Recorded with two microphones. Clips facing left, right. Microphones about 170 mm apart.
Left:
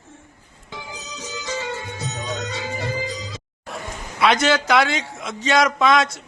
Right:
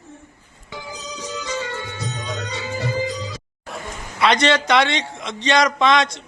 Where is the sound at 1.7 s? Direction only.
70° right (ahead or behind).